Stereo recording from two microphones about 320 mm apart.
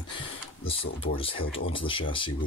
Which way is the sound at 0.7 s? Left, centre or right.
Centre.